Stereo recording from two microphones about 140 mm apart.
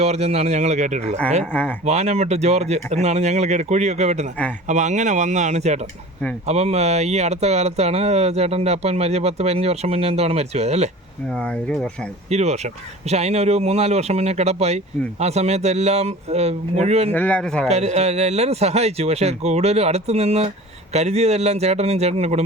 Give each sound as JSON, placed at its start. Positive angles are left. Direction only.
{"t": 0.0, "sound": "speech", "side_deg": -50}
{"t": 11.3, "sound": "speech", "side_deg": 5}
{"t": 12.3, "sound": "speech", "side_deg": -50}
{"t": 17.1, "sound": "speech", "side_deg": 10}
{"t": 17.7, "sound": "speech", "side_deg": -50}